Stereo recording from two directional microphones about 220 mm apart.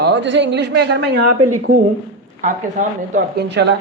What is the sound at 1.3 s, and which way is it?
Speech, 90° right.